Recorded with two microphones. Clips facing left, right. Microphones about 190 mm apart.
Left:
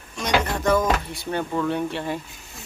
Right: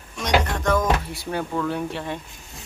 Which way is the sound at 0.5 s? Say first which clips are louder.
Left 1 dB; 5° left (ahead or behind).